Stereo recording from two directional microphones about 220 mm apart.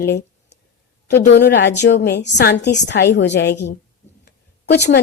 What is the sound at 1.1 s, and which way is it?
A woman's voice, 50° left (ahead or behind).